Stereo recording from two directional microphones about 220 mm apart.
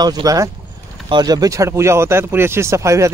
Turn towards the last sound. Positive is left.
turn(degrees=-15)  # may be behind; listen again after turning